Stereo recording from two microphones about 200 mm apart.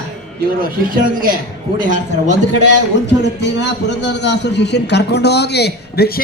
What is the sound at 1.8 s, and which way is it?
Speech, 40° right (ahead or behind).